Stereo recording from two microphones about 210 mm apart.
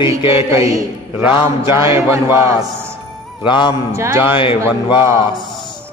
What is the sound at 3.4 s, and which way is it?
Speech, 20° left (ahead or behind).